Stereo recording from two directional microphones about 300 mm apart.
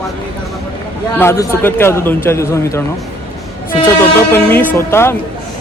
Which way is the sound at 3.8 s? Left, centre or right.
Centre.